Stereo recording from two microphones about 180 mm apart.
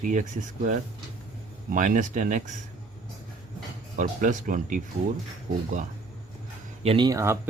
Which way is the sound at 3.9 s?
45° right (ahead or behind).